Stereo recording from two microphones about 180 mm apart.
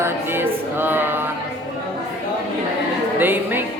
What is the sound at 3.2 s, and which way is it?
Speech, 10° right (ahead or behind).